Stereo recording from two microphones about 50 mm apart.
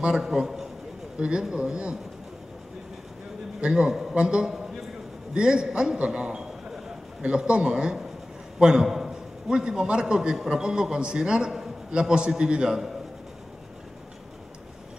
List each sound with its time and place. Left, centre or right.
0.1 s a man's voice: centre
1.1 s a man's voice: centre
3.6 s a man's voice: centre
6.7 s a sound: centre
8.5 s a man's voice: centre